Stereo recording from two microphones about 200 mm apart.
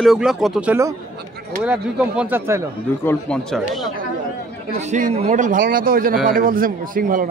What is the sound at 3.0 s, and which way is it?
Speech, 5° left (ahead or behind).